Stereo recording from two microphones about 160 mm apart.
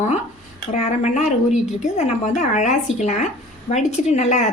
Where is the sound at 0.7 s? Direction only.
45° left (ahead or behind).